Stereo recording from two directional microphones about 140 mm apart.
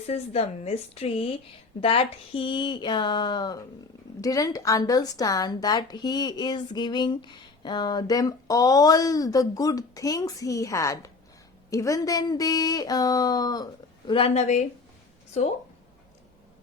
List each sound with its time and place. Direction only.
0.1 s a woman's voice: 50° left (ahead or behind); by 13.7 s 30° left (ahead or behind)
14.1 s a woman's voice: 45° left (ahead or behind)